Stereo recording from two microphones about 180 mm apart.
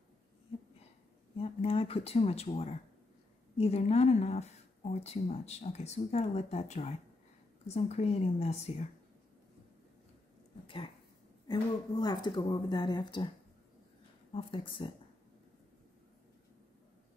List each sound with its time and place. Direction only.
1.4 s speech: 30° left (ahead or behind)
11.4 s speech: 25° left (ahead or behind)
14.3 s speech: 30° left (ahead or behind)